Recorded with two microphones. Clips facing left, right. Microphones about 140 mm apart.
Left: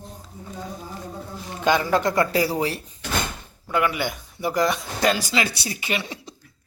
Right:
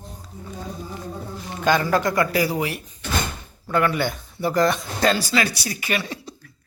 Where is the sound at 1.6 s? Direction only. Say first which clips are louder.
Even; 20° left (ahead or behind).